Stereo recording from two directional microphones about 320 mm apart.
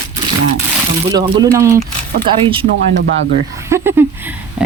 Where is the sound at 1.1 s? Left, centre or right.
Centre.